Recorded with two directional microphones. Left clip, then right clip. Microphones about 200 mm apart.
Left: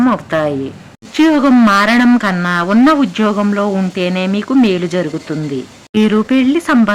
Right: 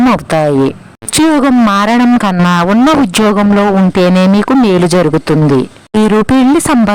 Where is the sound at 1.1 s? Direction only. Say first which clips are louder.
Right 2 dB; 55° right (ahead or behind).